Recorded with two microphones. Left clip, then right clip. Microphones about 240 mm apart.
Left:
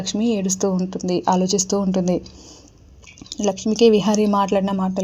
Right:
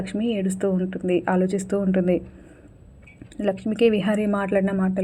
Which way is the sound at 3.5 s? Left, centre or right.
Left.